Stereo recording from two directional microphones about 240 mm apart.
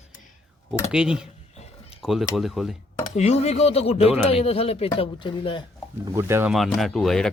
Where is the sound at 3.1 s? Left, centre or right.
Left.